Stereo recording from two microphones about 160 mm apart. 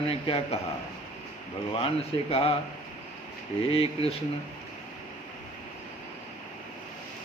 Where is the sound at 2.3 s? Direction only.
40° left (ahead or behind).